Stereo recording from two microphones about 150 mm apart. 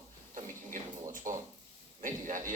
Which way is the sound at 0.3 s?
60° right (ahead or behind).